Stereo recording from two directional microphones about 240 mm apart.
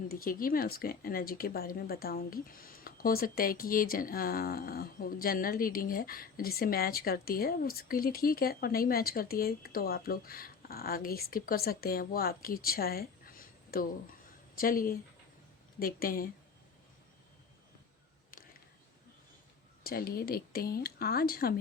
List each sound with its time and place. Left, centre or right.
0.1 s speech: left
18.3 s a sound: left
19.8 s speech: left